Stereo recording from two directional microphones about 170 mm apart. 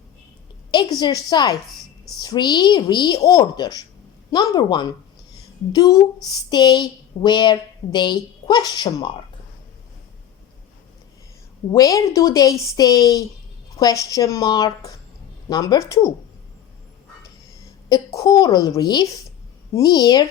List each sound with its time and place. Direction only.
0.7 s a woman's voice: 25° left (ahead or behind)
11.7 s a woman's voice: 20° left (ahead or behind)
17.8 s a woman's voice: 20° left (ahead or behind)